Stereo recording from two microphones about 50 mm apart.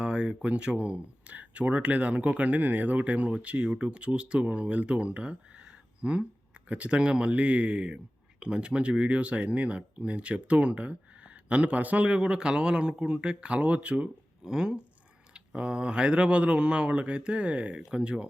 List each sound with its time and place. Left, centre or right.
0.0 s a sound: centre
0.4 s speech: right
14.4 s speech: centre